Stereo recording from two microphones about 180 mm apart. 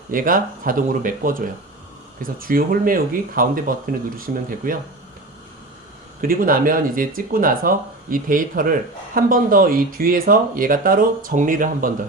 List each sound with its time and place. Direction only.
0.1 s speech: 50° right (ahead or behind)
6.2 s speech: 50° right (ahead or behind)